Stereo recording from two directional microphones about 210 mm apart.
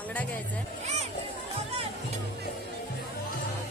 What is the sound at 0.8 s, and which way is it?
Speech, 30° right (ahead or behind).